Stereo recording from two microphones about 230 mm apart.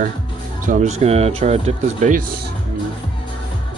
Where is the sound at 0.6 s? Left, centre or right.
Right.